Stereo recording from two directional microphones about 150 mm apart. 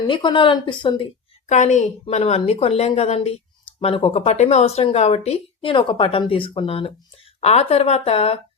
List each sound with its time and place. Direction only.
0.1 s a woman's voice: 30° left (ahead or behind)
1.5 s a woman's voice: 55° left (ahead or behind)